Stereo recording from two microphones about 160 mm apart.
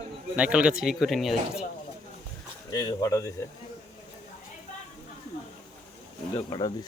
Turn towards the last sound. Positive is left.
turn(degrees=25)  # may be behind; listen again after turning